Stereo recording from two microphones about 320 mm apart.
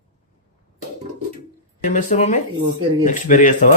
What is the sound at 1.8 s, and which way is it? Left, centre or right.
Speech, left.